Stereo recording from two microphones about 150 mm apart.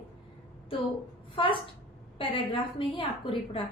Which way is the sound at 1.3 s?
35° left (ahead or behind).